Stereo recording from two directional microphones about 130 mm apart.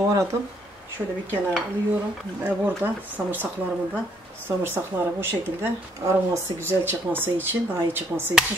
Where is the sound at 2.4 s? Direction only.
15° right (ahead or behind).